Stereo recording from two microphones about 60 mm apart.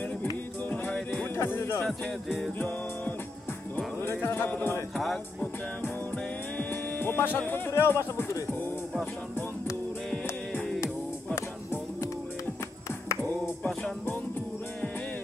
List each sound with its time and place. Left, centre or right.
1.3 s speech: left
1.8 s music: centre
4.0 s music: left
4.9 s music: centre
6.7 s music: left
7.7 s speech: left